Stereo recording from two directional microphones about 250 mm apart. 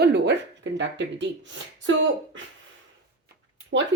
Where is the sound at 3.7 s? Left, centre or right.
Right.